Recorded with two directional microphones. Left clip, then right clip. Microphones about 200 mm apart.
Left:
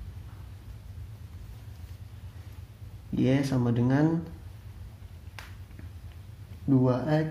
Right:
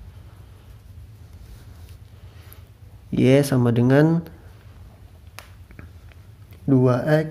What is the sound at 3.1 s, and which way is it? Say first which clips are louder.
Speech: right 10 dB; 45° right (ahead or behind).